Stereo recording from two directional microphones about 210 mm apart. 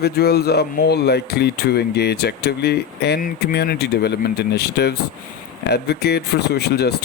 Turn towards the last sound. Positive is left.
turn(degrees=50)  # may be behind; listen again after turning